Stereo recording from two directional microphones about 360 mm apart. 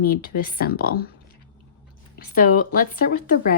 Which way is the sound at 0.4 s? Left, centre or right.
Left.